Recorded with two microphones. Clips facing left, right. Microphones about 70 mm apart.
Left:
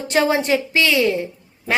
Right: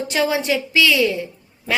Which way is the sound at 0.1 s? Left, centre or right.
Left.